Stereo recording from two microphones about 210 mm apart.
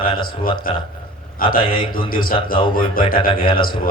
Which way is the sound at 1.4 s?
45° left (ahead or behind).